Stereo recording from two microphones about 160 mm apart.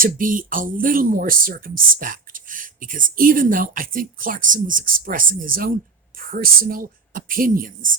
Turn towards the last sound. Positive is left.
turn(degrees=-60)  # may be behind; listen again after turning